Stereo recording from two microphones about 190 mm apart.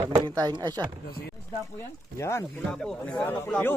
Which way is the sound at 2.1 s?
15° left (ahead or behind).